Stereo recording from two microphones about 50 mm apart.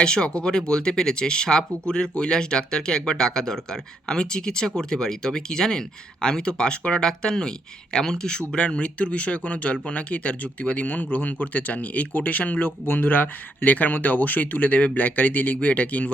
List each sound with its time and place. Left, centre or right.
0.0 s speech: centre